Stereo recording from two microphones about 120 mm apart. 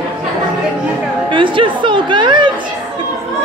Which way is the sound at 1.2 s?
45° right (ahead or behind).